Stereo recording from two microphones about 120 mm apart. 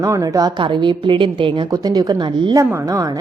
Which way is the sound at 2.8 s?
30° right (ahead or behind).